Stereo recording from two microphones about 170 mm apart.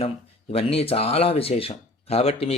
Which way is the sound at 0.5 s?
35° left (ahead or behind).